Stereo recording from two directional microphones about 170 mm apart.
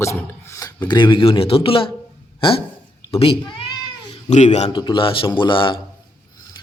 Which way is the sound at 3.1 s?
35° left (ahead or behind).